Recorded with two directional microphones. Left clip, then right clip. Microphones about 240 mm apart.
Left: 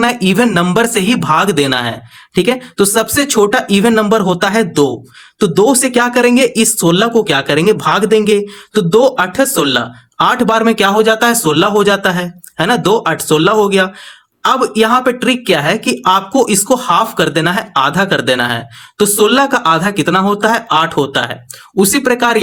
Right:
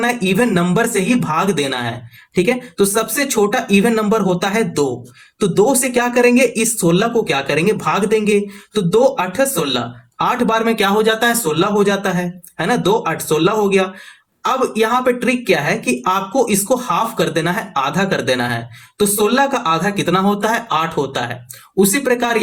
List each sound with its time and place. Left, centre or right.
0.0 s speech: left